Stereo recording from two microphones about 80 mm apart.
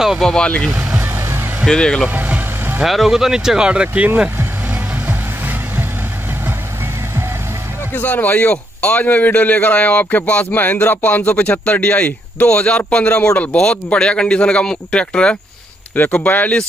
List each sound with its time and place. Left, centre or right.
0.2 s a man's voice: centre
0.7 s speech: centre
1.0 s vehicle: right
1.7 s a man's voice: centre
2.0 s vehicle: right
2.8 s speech: centre
5.0 s vehicle: right
7.9 s a man's voice: left
15.9 s speech: left